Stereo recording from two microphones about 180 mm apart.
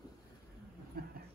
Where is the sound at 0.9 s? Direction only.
55° right (ahead or behind).